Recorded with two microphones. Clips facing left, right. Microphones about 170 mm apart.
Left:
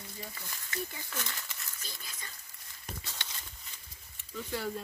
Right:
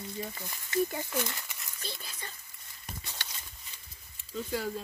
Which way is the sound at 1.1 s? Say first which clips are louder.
Right 7 dB; 15° right (ahead or behind).